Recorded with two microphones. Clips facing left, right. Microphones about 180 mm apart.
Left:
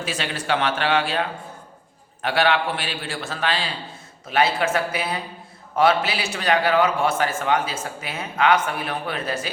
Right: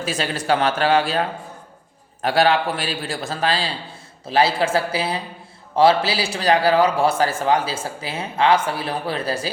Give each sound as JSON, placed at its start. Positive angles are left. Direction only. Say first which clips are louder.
{"t": 0.0, "sound": "a man's voice", "louder": "right 4 dB", "side_deg": -40}
{"t": 2.2, "sound": "a man's voice", "louder": "right 3 dB", "side_deg": -40}